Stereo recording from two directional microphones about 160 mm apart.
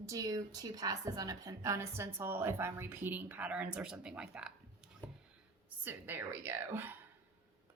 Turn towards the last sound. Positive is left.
turn(degrees=-15)  # may be behind; listen again after turning